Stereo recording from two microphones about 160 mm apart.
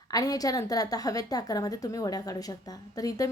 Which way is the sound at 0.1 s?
20° left (ahead or behind).